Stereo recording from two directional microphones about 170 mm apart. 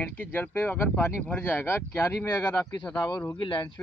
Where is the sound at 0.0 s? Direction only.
10° left (ahead or behind).